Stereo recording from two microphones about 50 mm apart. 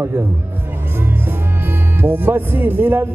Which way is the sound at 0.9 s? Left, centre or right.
Right.